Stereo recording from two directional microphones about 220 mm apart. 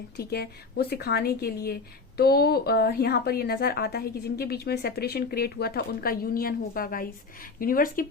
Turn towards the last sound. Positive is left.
turn(degrees=40)  # may be behind; listen again after turning